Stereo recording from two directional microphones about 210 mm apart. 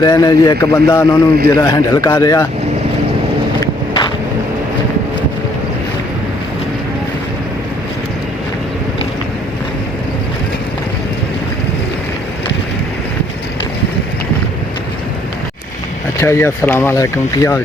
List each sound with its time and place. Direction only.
0.0 s speech: 15° left (ahead or behind)
16.2 s speech: 10° left (ahead or behind)